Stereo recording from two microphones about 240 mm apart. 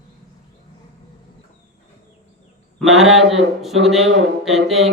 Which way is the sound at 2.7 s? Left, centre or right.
Centre.